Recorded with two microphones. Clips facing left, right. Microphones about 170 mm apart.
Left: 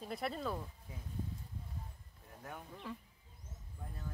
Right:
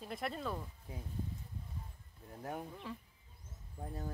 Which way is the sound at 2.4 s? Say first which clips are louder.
Right 7 dB; 35° right (ahead or behind).